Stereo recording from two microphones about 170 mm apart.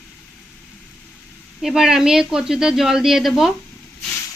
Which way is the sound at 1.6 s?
5° right (ahead or behind).